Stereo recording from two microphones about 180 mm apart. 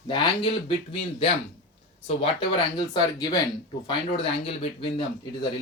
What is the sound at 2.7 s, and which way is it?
Speech, 25° left (ahead or behind).